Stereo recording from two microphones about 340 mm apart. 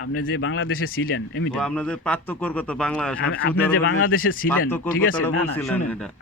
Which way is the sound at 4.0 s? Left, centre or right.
Left.